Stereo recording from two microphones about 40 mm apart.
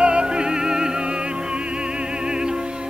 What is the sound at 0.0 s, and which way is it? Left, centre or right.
Music, right.